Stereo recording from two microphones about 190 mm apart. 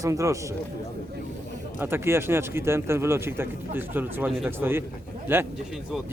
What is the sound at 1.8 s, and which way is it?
Speech, 10° right (ahead or behind).